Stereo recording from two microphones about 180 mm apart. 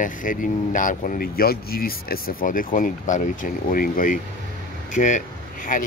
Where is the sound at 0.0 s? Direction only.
50° left (ahead or behind).